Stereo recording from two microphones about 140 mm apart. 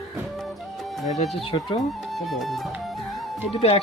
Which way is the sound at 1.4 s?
40° left (ahead or behind).